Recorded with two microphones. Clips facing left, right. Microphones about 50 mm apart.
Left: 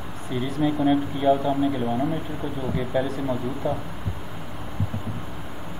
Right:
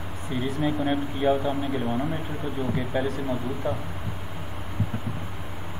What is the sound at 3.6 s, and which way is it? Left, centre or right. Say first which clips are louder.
Speech: left 3 dB; right.